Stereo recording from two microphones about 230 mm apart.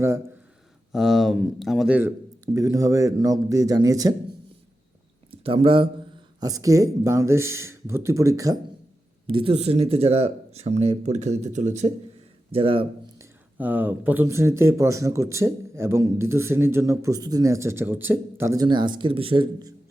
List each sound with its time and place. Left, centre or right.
0.9 s speech: centre
5.3 s speech: right
13.1 s speech: centre